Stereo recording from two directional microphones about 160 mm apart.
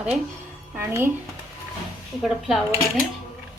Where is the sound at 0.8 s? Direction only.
15° right (ahead or behind).